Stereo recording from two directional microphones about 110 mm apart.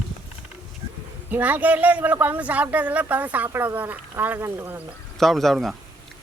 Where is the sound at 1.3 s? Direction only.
15° right (ahead or behind).